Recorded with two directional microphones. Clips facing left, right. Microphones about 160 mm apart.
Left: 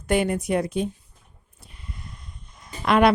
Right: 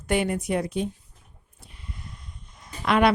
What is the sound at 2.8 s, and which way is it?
Speech, 45° left (ahead or behind).